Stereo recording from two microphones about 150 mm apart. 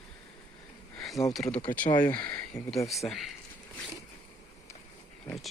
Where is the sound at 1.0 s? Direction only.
Centre (ahead or behind).